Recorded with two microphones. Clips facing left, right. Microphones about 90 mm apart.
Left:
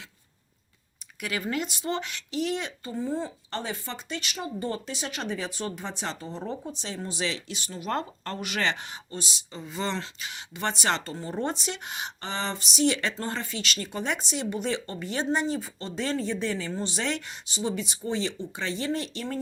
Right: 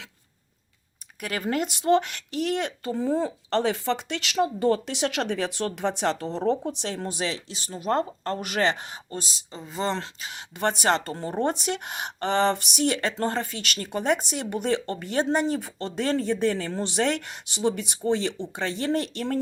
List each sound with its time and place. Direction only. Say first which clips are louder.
1.2 s speech: right 3 dB; 50° right (ahead or behind)
7.3 s speech: right 1 dB; 35° right (ahead or behind); by 19.4 s 55° right (ahead or behind)